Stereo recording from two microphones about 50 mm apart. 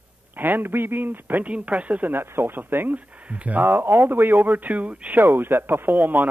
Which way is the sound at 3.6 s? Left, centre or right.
Right.